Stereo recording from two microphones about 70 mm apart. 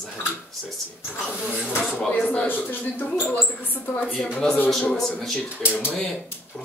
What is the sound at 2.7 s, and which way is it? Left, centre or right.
Speech, left.